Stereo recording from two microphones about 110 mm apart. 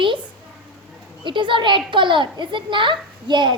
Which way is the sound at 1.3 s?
45° right (ahead or behind).